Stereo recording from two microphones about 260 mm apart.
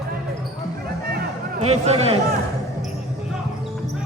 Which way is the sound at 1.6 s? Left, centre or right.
Right.